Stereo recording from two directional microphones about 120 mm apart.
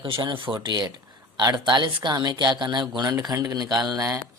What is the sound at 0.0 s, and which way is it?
Speech, 40° right (ahead or behind).